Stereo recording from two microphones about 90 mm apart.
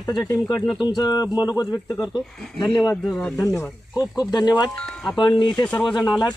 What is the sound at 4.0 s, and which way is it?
Speech, 45° left (ahead or behind).